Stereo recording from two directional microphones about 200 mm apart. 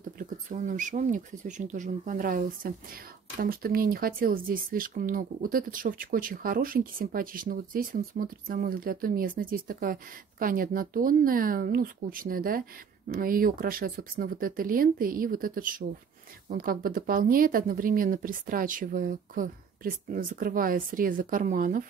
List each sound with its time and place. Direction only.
0.2 s speech: 40° right (ahead or behind)